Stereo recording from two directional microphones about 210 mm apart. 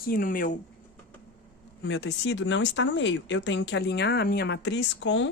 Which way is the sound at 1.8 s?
55° left (ahead or behind).